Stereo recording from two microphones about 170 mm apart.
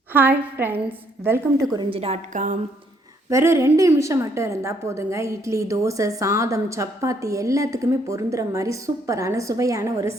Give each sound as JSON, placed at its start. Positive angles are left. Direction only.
{"t": 0.1, "sound": "a woman's voice", "side_deg": -10}
{"t": 1.7, "sound": "a woman's voice", "side_deg": -30}
{"t": 2.3, "sound": "speech", "side_deg": -50}
{"t": 3.2, "sound": "a woman's voice", "side_deg": -15}